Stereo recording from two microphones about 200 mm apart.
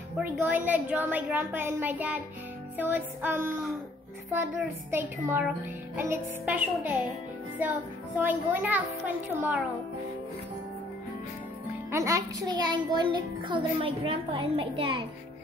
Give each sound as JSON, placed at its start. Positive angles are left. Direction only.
{"t": 0.2, "sound": "a woman's voice", "side_deg": -10}
{"t": 11.9, "sound": "a child's voice", "side_deg": -15}